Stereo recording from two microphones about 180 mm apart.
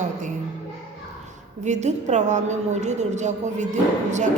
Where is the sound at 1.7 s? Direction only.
40° right (ahead or behind).